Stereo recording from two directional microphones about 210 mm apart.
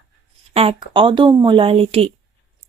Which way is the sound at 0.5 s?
25° right (ahead or behind).